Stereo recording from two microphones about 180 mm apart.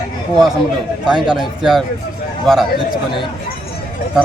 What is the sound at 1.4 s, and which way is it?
Speech, centre (ahead or behind).